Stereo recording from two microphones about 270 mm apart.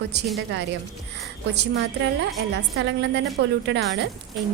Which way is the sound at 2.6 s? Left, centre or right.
Right.